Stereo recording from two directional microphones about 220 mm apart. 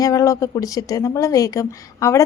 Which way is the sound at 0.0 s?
15° left (ahead or behind).